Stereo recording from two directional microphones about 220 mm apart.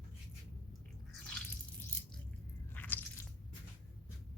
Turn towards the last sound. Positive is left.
turn(degrees=10)  # may be behind; listen again after turning